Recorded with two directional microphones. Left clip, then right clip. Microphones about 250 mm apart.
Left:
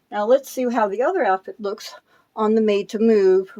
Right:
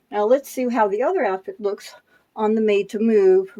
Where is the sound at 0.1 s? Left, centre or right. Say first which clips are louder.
Even; centre.